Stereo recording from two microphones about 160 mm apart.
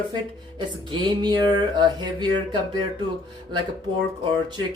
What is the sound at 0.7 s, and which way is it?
Speech, 30° right (ahead or behind).